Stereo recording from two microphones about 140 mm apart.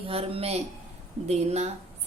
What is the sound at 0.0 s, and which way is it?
A woman's voice, 45° right (ahead or behind).